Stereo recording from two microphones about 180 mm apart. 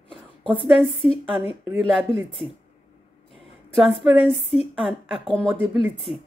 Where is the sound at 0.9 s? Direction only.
30° left (ahead or behind).